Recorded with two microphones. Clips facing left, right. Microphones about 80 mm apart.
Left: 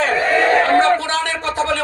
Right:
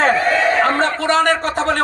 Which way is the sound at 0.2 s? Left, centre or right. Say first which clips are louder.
Even; centre.